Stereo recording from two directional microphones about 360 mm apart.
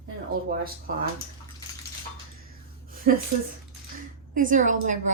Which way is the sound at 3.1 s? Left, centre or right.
Right.